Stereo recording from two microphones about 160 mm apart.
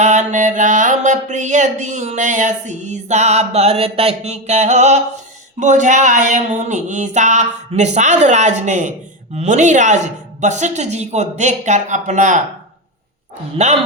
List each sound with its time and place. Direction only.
0.0 s mantra: 50° right (ahead or behind)
13.6 s speech: 40° right (ahead or behind)